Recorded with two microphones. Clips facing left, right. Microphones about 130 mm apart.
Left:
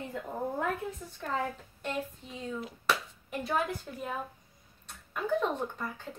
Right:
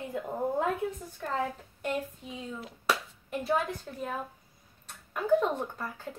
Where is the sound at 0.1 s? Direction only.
20° right (ahead or behind).